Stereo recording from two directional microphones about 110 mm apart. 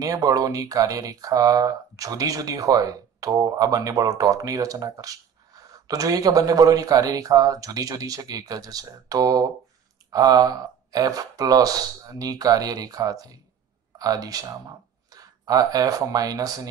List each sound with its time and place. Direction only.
0.0 s speech: 35° right (ahead or behind)